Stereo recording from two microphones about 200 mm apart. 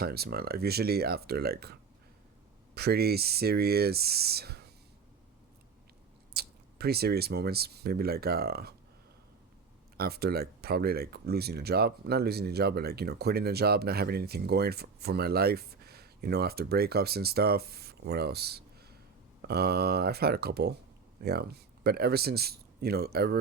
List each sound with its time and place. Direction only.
0.0 s speech: 50° right (ahead or behind)
2.7 s speech: 55° right (ahead or behind)
6.3 s speech: 50° right (ahead or behind)
10.0 s speech: 50° right (ahead or behind)